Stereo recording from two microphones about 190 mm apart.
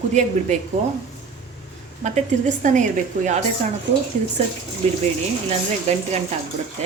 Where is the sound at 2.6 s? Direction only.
40° right (ahead or behind).